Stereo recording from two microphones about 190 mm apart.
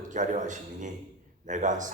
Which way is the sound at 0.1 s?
40° right (ahead or behind).